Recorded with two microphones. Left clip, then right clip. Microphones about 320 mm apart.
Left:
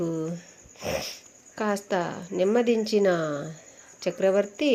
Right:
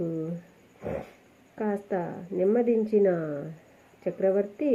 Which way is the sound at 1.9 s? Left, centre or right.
Centre.